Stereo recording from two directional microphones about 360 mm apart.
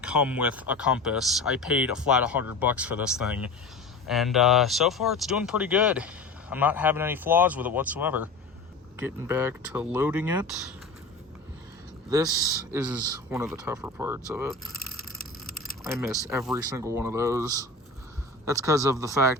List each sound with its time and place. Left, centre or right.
0.0 s speech: centre
12.7 s speech: centre
15.2 s vehicle: left
15.8 s speech: centre